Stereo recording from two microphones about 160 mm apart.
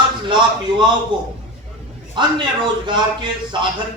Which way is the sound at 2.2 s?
30° right (ahead or behind).